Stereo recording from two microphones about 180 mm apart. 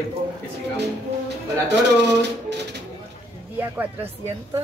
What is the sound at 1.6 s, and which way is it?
Speech, 75° right (ahead or behind).